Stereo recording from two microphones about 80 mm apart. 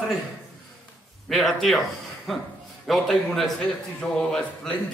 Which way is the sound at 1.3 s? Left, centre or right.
Centre.